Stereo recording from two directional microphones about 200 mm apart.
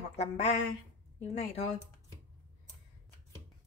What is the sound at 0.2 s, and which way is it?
Speech, 30° left (ahead or behind).